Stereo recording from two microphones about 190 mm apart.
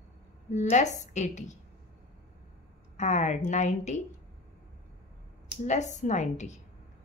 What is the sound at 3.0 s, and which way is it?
A woman's voice, 40° left (ahead or behind).